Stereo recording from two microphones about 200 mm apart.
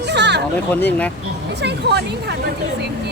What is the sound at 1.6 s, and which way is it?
Speech, 55° right (ahead or behind).